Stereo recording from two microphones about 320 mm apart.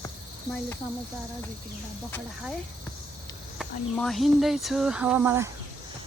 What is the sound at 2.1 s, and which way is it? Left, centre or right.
Speech, centre.